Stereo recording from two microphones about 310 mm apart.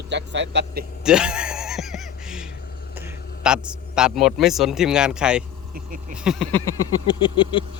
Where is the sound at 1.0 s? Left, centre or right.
Centre.